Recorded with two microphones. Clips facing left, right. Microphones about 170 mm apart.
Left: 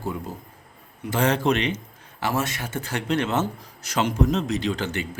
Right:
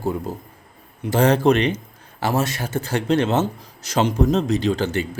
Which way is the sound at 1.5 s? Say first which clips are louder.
Right 6 dB; 50° right (ahead or behind).